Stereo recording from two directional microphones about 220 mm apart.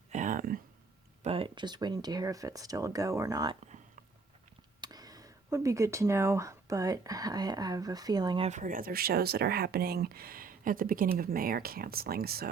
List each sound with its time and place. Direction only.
0.1 s a sound: 35° right (ahead or behind)
1.2 s speech: 25° right (ahead or behind)
4.8 s speech: 15° right (ahead or behind)
8.4 s speech: 35° right (ahead or behind)